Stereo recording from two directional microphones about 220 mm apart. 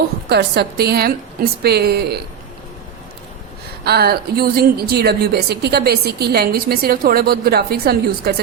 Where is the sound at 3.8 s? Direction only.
45° right (ahead or behind).